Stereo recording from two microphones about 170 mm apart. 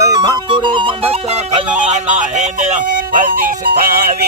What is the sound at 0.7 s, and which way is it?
Music, 30° right (ahead or behind).